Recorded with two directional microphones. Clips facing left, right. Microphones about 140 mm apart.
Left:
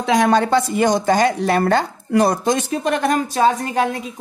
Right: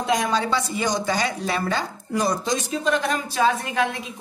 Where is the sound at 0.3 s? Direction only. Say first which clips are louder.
Left 7 dB; 55° left (ahead or behind).